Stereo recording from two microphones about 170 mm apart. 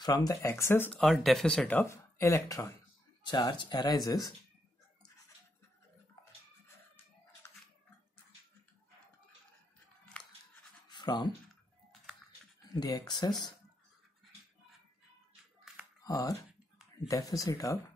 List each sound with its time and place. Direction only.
0.0 s speech: 20° left (ahead or behind)
0.9 s speech: centre (ahead or behind); by 4.3 s 25° left (ahead or behind)
10.9 s a sound: 25° left (ahead or behind)
12.6 s speech: 20° left (ahead or behind)
15.6 s a sound: 5° right (ahead or behind)
16.0 s speech: 20° left (ahead or behind)